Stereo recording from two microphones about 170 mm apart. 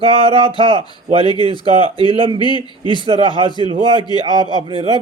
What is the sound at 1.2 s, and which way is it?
Speech, 25° left (ahead or behind).